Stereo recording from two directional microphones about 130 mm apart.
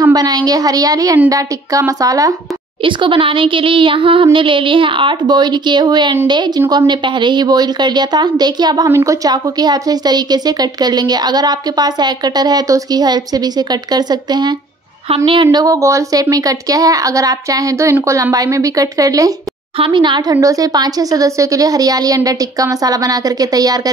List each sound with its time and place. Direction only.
0.1 s a woman's voice: 30° right (ahead or behind)
2.8 s a woman's voice: 40° right (ahead or behind)
8.8 s a woman's voice: 20° right (ahead or behind)
15.0 s a woman's voice: 45° right (ahead or behind)
15.4 s a woman's voice: 25° right (ahead or behind)
19.8 s a woman's voice: 35° right (ahead or behind)